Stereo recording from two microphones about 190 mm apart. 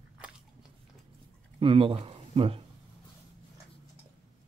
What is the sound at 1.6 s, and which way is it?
Speech, 30° right (ahead or behind).